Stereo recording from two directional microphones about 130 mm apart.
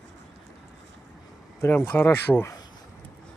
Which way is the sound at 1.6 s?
15° left (ahead or behind).